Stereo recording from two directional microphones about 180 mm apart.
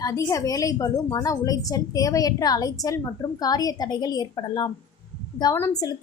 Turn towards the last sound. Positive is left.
turn(degrees=20)  # may be behind; listen again after turning